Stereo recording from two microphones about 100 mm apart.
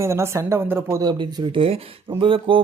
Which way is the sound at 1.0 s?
40° right (ahead or behind).